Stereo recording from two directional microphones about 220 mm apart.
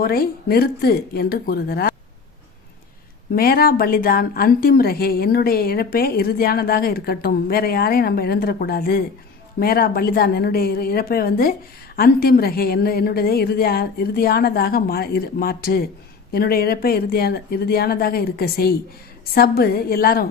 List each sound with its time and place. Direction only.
0.0 s speech: 45° left (ahead or behind)
3.3 s speech: 40° left (ahead or behind)